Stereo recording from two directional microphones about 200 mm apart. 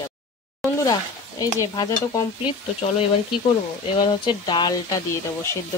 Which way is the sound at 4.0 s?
25° left (ahead or behind).